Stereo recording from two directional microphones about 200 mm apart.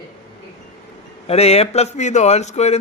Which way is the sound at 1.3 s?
30° left (ahead or behind).